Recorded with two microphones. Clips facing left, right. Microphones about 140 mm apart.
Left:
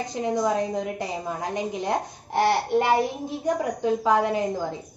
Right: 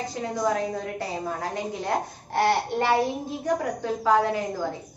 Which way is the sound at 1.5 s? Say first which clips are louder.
Left 3 dB; 20° left (ahead or behind).